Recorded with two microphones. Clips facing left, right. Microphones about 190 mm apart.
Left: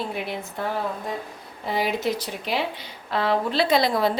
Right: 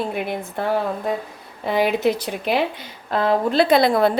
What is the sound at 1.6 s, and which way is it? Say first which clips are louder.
Speech: right 6 dB; 60° right (ahead or behind).